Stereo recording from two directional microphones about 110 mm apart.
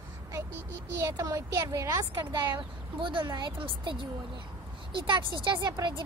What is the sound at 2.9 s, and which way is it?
A woman's voice, 50° right (ahead or behind).